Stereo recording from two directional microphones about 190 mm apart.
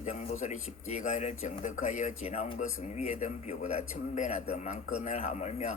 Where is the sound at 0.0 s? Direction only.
35° left (ahead or behind).